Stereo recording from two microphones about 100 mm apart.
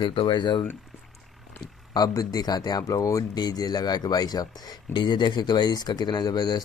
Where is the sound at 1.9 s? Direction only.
40° left (ahead or behind).